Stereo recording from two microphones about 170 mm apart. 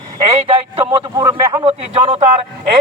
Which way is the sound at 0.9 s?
25° right (ahead or behind).